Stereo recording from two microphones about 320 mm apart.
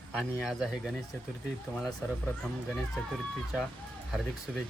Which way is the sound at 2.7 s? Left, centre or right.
Centre.